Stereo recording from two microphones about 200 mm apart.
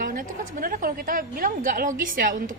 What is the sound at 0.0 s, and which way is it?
A woman's voice, 45° right (ahead or behind).